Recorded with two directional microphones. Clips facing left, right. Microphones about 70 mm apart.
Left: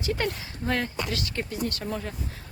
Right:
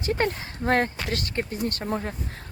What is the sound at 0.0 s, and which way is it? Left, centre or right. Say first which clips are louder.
Speech: right 3 dB; right.